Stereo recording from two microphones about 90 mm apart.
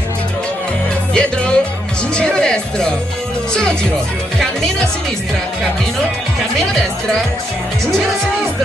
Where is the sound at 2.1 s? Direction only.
10° left (ahead or behind).